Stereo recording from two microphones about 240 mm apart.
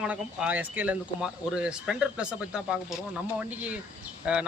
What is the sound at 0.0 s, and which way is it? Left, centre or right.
Speech, centre.